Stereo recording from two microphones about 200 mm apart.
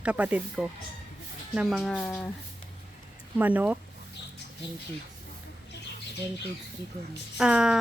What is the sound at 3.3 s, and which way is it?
Speech, 10° right (ahead or behind).